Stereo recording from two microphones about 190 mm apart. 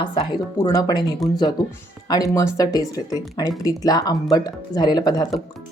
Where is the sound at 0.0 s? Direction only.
25° left (ahead or behind).